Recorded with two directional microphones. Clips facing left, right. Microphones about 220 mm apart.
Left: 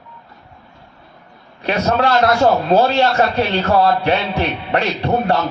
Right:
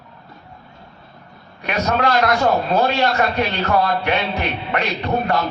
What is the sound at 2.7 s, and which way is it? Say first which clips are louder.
A man's voice: left 4 dB; 30° left (ahead or behind).